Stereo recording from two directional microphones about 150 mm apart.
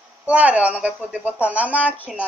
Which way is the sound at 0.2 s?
10° right (ahead or behind).